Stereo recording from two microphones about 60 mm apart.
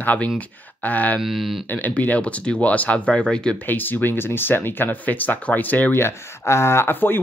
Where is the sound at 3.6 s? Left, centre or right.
Left.